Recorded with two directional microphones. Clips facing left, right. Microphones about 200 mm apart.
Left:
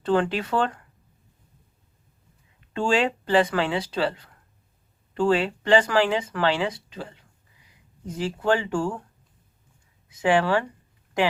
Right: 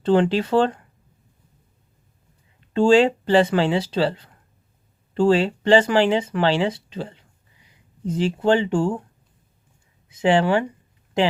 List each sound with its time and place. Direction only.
0.0 s speech: 25° right (ahead or behind)
2.7 s speech: 30° right (ahead or behind)
10.1 s speech: 25° right (ahead or behind)